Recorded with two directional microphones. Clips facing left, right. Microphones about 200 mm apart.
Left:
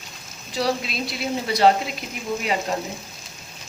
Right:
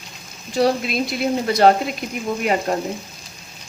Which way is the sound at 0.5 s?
50° right (ahead or behind).